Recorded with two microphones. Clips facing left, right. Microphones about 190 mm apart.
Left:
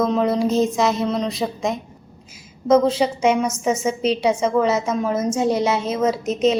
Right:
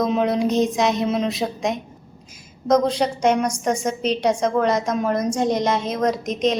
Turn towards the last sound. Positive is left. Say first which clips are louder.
# left 2 dB
turn(degrees=5)  # may be behind; listen again after turning